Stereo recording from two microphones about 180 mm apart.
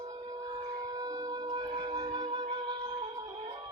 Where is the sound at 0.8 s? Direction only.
20° right (ahead or behind).